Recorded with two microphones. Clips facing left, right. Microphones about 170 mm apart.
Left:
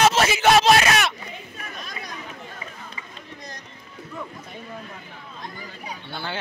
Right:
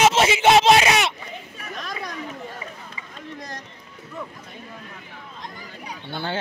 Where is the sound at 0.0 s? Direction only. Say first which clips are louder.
Right 1 dB; 25° right (ahead or behind).